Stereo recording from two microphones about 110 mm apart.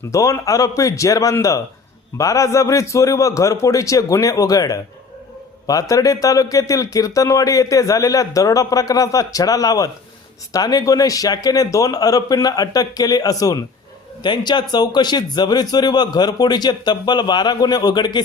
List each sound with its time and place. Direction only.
0.1 s a man's voice: 30° left (ahead or behind)
5.9 s speech: 30° left (ahead or behind)